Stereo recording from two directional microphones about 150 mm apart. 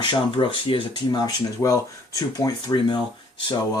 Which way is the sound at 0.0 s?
30° left (ahead or behind).